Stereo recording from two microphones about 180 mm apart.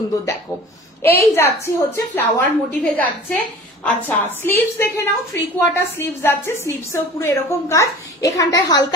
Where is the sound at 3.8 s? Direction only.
10° left (ahead or behind).